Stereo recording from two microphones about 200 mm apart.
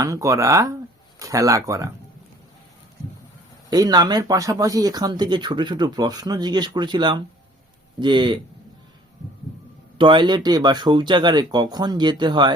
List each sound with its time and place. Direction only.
0.0 s speech: 15° right (ahead or behind)
3.7 s speech: 20° right (ahead or behind)
10.0 s speech: 25° right (ahead or behind)